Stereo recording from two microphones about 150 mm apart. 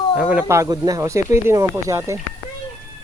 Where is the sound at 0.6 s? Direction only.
25° right (ahead or behind).